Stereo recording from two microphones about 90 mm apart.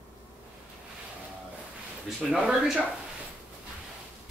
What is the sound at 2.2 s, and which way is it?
Speech, 10° right (ahead or behind).